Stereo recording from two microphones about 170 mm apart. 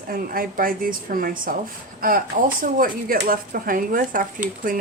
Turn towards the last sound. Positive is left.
turn(degrees=-55)  # may be behind; listen again after turning